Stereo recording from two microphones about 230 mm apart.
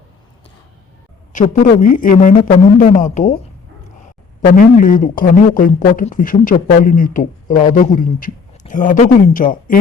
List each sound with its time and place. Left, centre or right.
1.3 s speech: left
4.4 s speech: left